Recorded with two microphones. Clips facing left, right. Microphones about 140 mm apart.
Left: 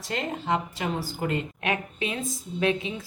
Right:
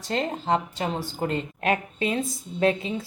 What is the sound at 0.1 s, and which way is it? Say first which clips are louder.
Speech: right 3 dB; 30° right (ahead or behind).